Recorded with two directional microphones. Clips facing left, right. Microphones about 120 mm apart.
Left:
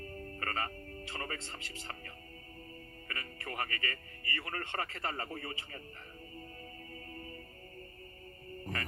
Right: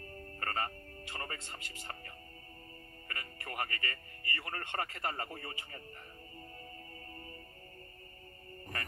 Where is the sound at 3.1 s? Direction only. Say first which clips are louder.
Left 2 dB; 25° right (ahead or behind).